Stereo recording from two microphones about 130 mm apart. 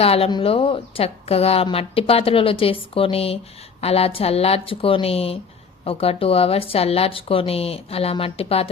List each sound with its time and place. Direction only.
0.0 s a woman's voice: 50° left (ahead or behind)